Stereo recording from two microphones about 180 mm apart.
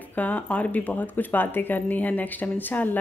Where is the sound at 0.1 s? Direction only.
10° left (ahead or behind).